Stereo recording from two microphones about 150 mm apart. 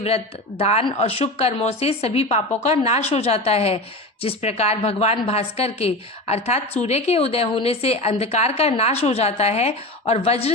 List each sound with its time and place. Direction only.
0.6 s a woman's voice: 45° left (ahead or behind)